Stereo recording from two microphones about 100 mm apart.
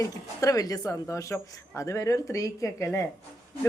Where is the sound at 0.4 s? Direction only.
35° left (ahead or behind).